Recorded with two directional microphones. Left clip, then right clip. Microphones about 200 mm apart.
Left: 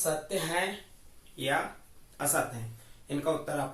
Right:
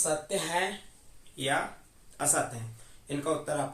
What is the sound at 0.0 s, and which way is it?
Speech, 25° right (ahead or behind).